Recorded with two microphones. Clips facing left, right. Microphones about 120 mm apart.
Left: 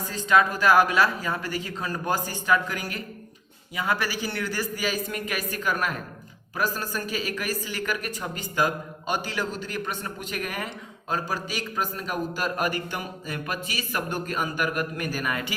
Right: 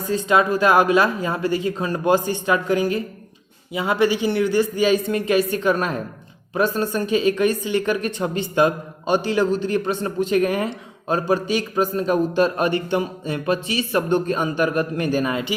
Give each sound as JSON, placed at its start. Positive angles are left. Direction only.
{"t": 0.3, "sound": "a woman's voice", "side_deg": -20}